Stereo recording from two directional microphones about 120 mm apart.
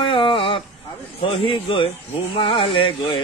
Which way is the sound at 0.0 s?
45° left (ahead or behind).